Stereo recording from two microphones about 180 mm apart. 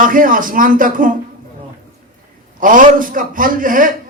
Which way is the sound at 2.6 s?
50° right (ahead or behind).